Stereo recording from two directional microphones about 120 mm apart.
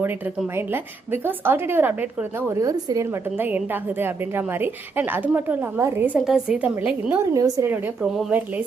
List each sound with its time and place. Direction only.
0.5 s a woman's voice: 20° right (ahead or behind)
2.5 s a woman's voice: 30° right (ahead or behind)
3.3 s a woman's voice: 15° right (ahead or behind)
6.1 s a woman's voice: 5° right (ahead or behind)
7.3 s a woman's voice: 30° right (ahead or behind)